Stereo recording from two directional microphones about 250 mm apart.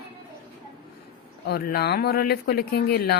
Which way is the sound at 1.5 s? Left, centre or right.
Left.